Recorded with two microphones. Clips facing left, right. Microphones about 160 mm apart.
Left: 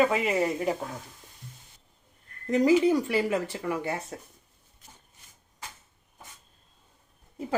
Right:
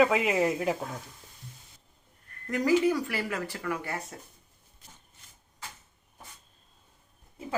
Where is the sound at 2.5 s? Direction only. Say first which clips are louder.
Left 3 dB; 25° left (ahead or behind).